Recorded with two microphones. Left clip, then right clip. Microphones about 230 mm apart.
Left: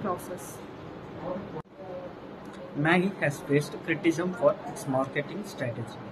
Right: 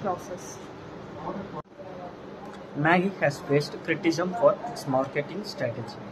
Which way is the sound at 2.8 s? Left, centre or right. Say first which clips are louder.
Right 3 dB; centre.